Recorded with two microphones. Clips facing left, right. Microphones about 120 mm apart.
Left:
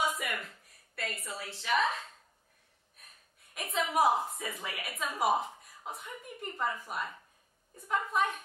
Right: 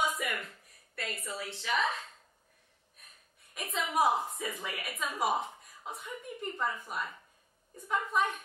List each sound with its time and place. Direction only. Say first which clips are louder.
0.2 s a sound: right 1 dB; centre (ahead or behind)
0.9 s a woman's voice: even; centre (ahead or behind)
3.5 s a woman's voice: left 1 dB; centre (ahead or behind)